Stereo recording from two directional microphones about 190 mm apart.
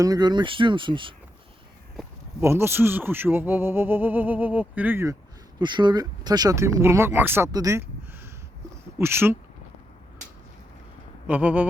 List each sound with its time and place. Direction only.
0.0 s speech: 20° right (ahead or behind)
2.4 s speech: 15° right (ahead or behind)
5.5 s speech: 25° right (ahead or behind)
9.0 s speech: 10° right (ahead or behind)
11.3 s speech: 10° right (ahead or behind)